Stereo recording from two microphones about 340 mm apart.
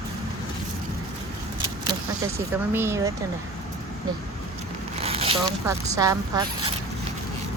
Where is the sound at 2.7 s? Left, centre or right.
Centre.